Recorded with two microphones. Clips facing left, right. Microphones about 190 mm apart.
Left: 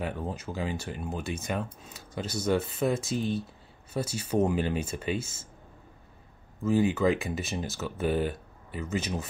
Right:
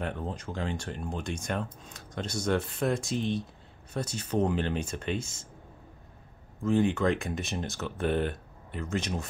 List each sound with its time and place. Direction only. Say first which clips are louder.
0.0 s speech: left 1 dB; 5° left (ahead or behind)
6.6 s speech: left 1 dB; 5° left (ahead or behind)